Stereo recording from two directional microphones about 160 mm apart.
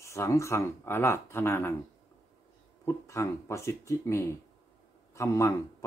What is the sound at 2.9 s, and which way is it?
Speech, 20° left (ahead or behind).